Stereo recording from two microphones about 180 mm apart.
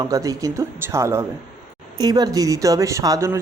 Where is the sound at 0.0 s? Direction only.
20° right (ahead or behind).